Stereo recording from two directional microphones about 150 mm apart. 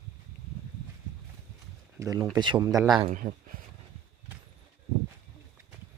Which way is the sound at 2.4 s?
30° right (ahead or behind).